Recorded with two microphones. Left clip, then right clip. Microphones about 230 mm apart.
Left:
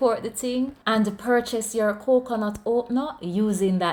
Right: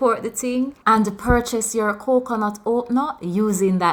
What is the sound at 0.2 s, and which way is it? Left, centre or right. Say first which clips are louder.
Speech: right 3 dB; centre.